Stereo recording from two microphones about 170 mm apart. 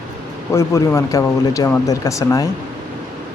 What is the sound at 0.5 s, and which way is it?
Speech, 15° left (ahead or behind).